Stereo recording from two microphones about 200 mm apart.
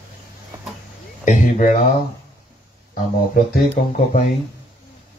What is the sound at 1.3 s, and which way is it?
Speech, 40° left (ahead or behind).